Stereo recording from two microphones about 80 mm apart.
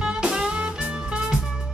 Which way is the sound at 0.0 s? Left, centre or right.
Centre.